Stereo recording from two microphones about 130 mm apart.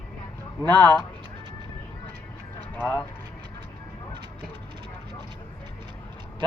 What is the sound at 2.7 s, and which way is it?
Speech, 15° left (ahead or behind).